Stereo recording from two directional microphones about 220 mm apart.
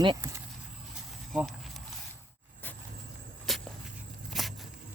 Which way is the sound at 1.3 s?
Centre (ahead or behind).